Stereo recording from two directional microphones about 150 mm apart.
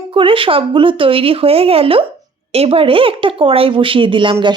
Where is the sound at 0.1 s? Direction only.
35° right (ahead or behind).